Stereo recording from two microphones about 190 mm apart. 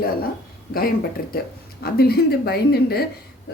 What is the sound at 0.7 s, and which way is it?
Speech, 50° left (ahead or behind).